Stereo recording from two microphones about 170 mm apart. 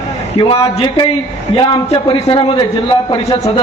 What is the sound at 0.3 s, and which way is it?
Speech, 25° left (ahead or behind).